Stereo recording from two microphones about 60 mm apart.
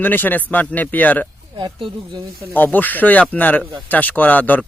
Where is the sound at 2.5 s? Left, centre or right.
Left.